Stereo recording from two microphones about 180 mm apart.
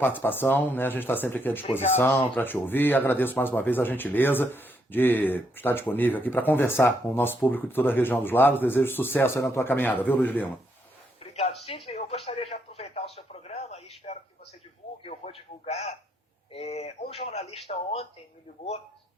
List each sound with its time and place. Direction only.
0.0 s speech: 10° left (ahead or behind)
11.2 s a sound: 35° left (ahead or behind)
11.9 s radio: 35° left (ahead or behind)
15.0 s a man's voice: 35° left (ahead or behind)